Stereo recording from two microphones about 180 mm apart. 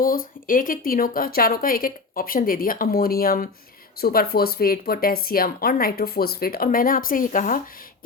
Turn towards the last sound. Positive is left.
turn(degrees=50)  # may be behind; listen again after turning